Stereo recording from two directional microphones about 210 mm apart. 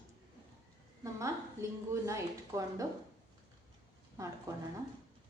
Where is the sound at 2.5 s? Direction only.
15° right (ahead or behind).